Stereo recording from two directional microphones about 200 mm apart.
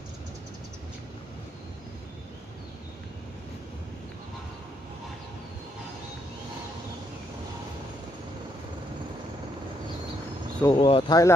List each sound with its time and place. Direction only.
10.6 s speech: 20° left (ahead or behind)